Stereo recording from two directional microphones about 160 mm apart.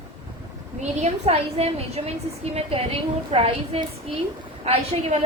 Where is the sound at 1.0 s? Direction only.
40° right (ahead or behind).